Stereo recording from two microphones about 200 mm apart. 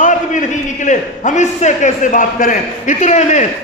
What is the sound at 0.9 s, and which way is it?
A man's voice, 35° left (ahead or behind).